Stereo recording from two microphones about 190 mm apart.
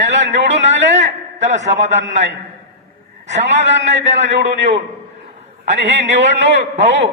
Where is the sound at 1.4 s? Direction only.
40° right (ahead or behind).